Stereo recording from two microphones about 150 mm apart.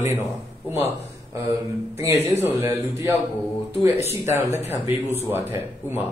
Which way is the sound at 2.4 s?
15° right (ahead or behind).